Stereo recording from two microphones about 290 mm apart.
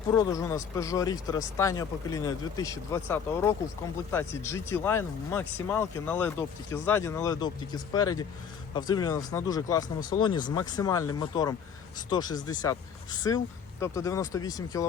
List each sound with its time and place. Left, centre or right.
0.1 s speech: centre